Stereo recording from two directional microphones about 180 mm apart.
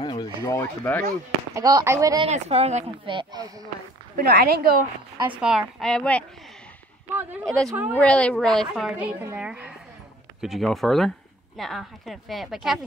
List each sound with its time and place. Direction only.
0.0 s speech: 25° left (ahead or behind)
1.5 s speech: 20° right (ahead or behind)
2.2 s speech: 35° right (ahead or behind)
4.2 s a woman's voice: 60° right (ahead or behind)
5.4 s speech: 5° right (ahead or behind)
7.4 s speech: 5° left (ahead or behind)
7.7 s a woman's voice: 10° right (ahead or behind)
8.0 s a woman's voice: 5° left (ahead or behind)